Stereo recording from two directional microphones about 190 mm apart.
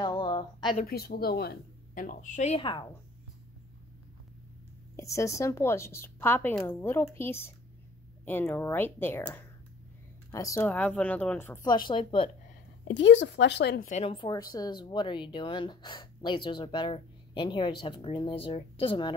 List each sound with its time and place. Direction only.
0.0 s a sound: 25° left (ahead or behind)
0.8 s speech: 55° left (ahead or behind); by 2.9 s 25° left (ahead or behind)
4.9 s a woman's voice: 15° left (ahead or behind)
11.7 s speech: 25° left (ahead or behind)
12.8 s speech: 70° left (ahead or behind)
13.8 s speech: 35° left (ahead or behind)